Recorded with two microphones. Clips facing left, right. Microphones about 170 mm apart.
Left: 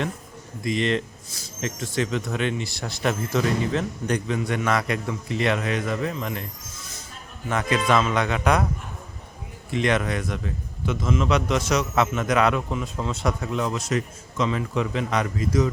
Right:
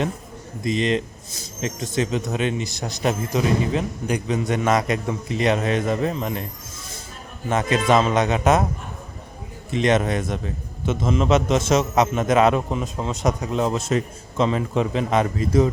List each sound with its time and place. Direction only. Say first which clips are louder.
0.6 s a man's voice: right 2 dB; 20° right (ahead or behind)
7.4 s a man's voice: right 3 dB; 25° right (ahead or behind)
9.7 s a man's voice: right 4 dB; 25° right (ahead or behind)